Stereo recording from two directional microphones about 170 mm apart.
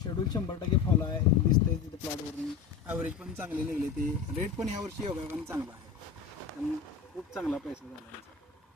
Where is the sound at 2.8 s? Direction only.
10° right (ahead or behind).